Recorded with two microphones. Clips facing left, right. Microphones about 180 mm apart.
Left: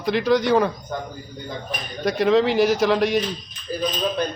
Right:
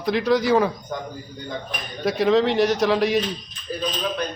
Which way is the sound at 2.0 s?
Centre (ahead or behind).